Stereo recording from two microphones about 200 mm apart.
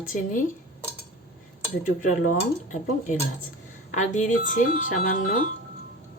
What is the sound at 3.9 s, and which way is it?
Speech, 40° left (ahead or behind).